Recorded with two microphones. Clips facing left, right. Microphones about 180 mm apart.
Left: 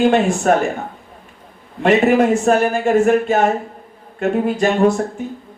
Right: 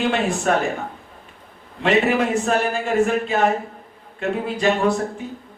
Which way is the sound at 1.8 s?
45° left (ahead or behind).